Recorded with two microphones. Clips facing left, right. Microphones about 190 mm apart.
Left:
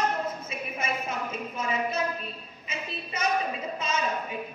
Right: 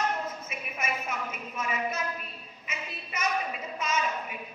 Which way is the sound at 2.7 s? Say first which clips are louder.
Left 3 dB; 30° left (ahead or behind).